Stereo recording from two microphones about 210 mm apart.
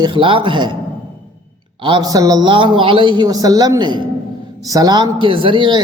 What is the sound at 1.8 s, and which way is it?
Speech, 25° right (ahead or behind).